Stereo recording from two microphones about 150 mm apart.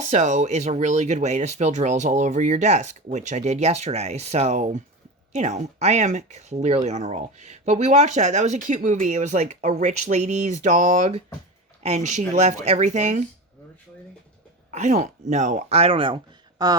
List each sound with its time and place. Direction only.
0.0 s speech: 50° right (ahead or behind)
14.7 s speech: 50° right (ahead or behind); by 16.7 s 30° right (ahead or behind)